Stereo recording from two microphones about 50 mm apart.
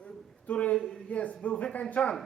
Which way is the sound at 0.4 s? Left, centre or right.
Left.